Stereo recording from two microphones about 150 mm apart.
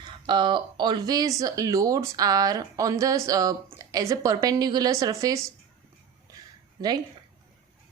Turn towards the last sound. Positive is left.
turn(degrees=-25)  # may be behind; listen again after turning